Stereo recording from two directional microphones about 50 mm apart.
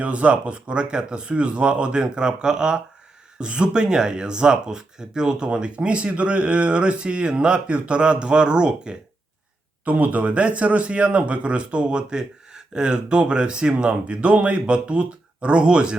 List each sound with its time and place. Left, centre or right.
0.0 s speech: right
9.8 s speech: right